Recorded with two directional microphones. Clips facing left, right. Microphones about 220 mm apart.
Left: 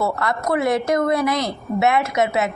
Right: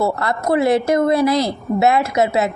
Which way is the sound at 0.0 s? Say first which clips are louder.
Right 3 dB; 30° right (ahead or behind).